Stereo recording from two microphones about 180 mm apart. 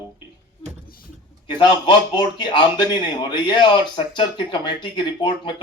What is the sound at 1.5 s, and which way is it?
A man's voice, 25° left (ahead or behind).